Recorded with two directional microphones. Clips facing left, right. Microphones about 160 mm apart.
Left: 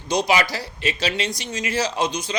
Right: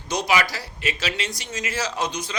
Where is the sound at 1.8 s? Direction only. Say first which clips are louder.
Left 5 dB; 30° left (ahead or behind).